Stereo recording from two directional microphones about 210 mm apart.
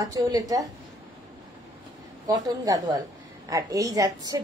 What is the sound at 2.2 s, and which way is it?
Speech, 15° right (ahead or behind).